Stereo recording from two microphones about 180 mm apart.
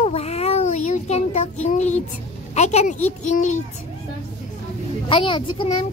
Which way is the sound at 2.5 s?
40° left (ahead or behind).